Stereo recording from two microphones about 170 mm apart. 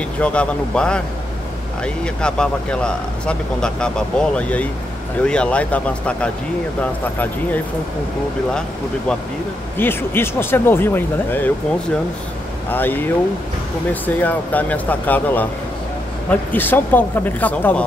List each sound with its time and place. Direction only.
0.2 s speech: 5° left (ahead or behind)
2.2 s speech: 5° left (ahead or behind)
9.8 s speech: 15° left (ahead or behind)
12.7 s speech: 10° left (ahead or behind)